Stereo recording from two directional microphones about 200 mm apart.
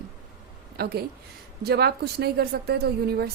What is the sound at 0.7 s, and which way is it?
Speech, 50° right (ahead or behind).